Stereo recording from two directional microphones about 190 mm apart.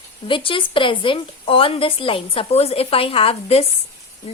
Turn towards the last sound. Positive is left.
turn(degrees=30)  # may be behind; listen again after turning